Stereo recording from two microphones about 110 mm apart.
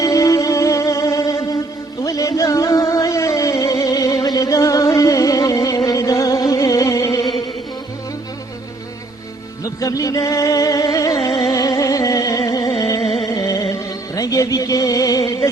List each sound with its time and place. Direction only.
0.0 s music: 30° left (ahead or behind)
9.6 s music: 35° left (ahead or behind)
11.5 s a sound: 30° left (ahead or behind)
13.0 s music: 65° left (ahead or behind)
13.2 s music: 30° left (ahead or behind)